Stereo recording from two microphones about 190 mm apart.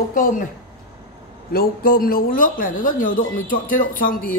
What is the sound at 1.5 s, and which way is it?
Speech, 50° left (ahead or behind).